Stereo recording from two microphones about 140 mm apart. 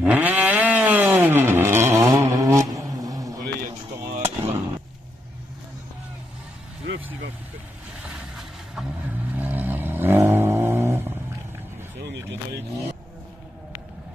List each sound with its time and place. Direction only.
0.0 s vehicle: 10° right (ahead or behind); by 3.4 s 25° right (ahead or behind)
4.2 s fireworks: 15° right (ahead or behind)
8.0 s vehicle: 5° right (ahead or behind)
9.3 s a sound: 10° right (ahead or behind)